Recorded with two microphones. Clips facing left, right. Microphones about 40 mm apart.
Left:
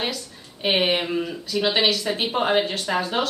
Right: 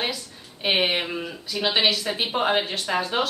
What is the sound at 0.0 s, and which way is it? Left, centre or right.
Speech, centre.